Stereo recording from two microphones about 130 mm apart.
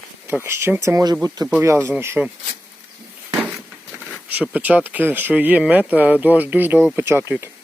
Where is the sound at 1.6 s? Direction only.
15° right (ahead or behind).